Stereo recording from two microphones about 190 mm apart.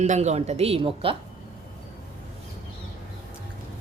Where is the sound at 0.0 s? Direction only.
35° right (ahead or behind).